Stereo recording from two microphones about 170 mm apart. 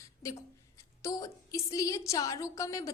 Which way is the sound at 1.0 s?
20° left (ahead or behind).